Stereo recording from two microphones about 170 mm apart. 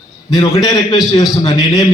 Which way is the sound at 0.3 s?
25° left (ahead or behind).